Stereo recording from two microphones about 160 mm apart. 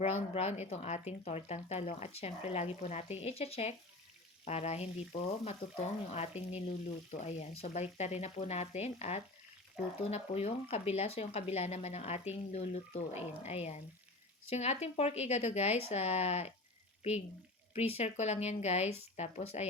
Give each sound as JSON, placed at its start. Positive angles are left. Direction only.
{"t": 0.0, "sound": "speech", "side_deg": 40}